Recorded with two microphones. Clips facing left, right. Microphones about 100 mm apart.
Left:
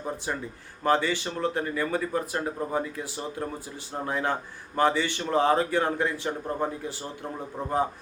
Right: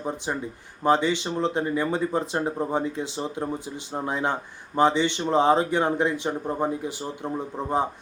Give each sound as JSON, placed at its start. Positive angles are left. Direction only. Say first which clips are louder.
{"t": 0.9, "sound": "speech", "louder": "right 3 dB", "side_deg": -20}